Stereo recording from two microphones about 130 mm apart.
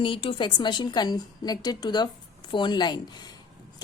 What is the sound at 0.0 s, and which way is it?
A woman's voice, 45° left (ahead or behind).